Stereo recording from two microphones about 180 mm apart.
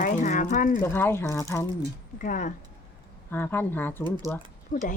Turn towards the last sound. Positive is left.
turn(degrees=45)  # may be behind; listen again after turning